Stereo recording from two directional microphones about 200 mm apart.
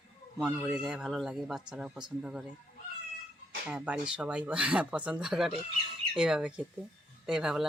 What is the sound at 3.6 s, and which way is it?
A man's voice, 5° right (ahead or behind).